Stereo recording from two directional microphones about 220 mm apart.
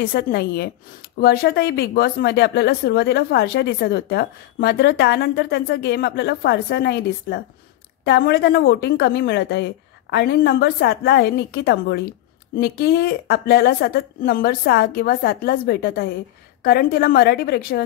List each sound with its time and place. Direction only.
0.0 s speech: 45° left (ahead or behind)